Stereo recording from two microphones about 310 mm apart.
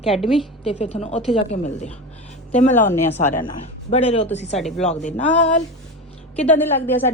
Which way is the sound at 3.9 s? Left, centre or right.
Centre.